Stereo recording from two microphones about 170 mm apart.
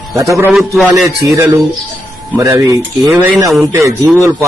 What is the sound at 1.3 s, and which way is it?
Speech, 20° right (ahead or behind).